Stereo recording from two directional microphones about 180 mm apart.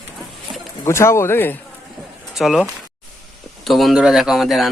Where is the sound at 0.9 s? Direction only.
15° left (ahead or behind).